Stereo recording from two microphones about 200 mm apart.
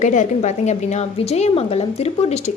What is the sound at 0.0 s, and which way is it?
Speech, 35° left (ahead or behind).